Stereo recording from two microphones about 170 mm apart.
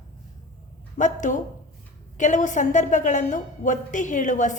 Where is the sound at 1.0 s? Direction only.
45° left (ahead or behind).